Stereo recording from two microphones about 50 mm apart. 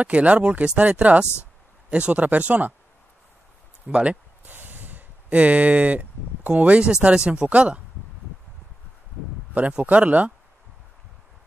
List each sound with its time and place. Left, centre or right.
0.0 s speech: right
1.2 s speech: left
1.9 s speech: right
3.8 s speech: right
4.5 s a sound: right
6.9 s speech: centre
9.8 s speech: right